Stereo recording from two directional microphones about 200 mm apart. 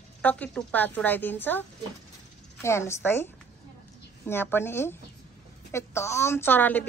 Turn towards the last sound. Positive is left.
turn(degrees=10)  # may be behind; listen again after turning